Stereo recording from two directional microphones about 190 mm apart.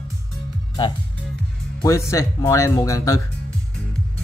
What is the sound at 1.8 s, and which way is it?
Speech, 15° left (ahead or behind).